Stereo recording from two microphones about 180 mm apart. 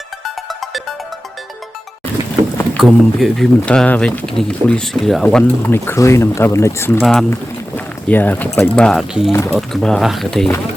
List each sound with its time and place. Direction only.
0.6 s music: centre (ahead or behind)
2.7 s speech: centre (ahead or behind)
7.0 s speech: centre (ahead or behind)
9.3 s speech: 15° left (ahead or behind)
9.6 s speech: centre (ahead or behind)